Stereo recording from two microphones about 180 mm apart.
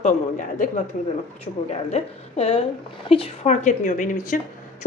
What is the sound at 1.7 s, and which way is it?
A woman's voice, 35° left (ahead or behind).